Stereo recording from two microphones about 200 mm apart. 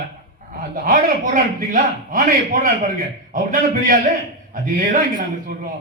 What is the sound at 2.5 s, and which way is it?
A man's voice, 45° right (ahead or behind).